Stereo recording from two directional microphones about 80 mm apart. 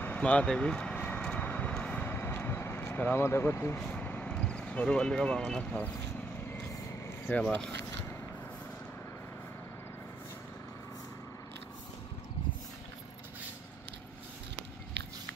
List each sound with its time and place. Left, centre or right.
0.0 s vehicle: centre
5.6 s speech: centre
7.4 s speech: centre